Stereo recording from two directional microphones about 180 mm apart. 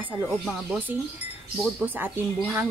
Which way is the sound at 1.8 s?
10° right (ahead or behind).